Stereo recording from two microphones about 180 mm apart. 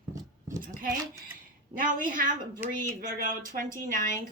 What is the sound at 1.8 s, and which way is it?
Speech, 50° right (ahead or behind).